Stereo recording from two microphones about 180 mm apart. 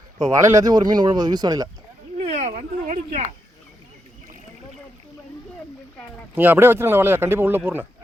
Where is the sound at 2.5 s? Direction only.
50° right (ahead or behind).